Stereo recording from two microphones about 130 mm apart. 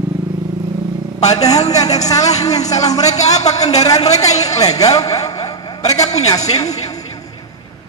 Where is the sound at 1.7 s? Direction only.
25° left (ahead or behind).